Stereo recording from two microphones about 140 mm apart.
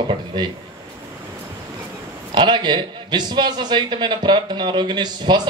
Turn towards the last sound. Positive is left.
turn(degrees=-30)  # may be behind; listen again after turning